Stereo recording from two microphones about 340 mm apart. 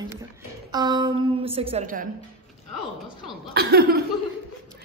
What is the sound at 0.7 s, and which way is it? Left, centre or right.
A woman's voice, centre.